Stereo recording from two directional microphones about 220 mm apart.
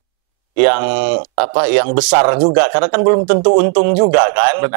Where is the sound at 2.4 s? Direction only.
25° right (ahead or behind).